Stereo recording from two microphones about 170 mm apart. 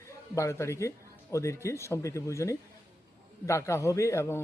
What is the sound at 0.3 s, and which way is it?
Speech, 15° left (ahead or behind).